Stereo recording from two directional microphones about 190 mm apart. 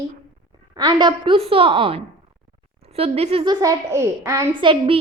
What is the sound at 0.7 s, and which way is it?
A child's voice, 20° right (ahead or behind).